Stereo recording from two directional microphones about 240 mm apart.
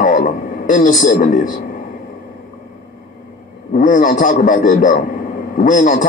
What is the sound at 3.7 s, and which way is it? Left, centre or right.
A man's voice, left.